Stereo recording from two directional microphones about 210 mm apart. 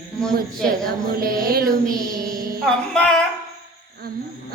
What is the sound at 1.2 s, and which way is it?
Mantra, 45° right (ahead or behind).